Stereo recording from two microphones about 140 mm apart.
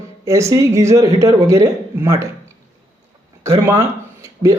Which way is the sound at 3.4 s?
20° right (ahead or behind).